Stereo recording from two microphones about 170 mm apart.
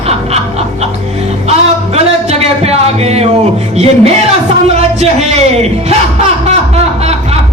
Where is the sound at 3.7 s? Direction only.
35° right (ahead or behind).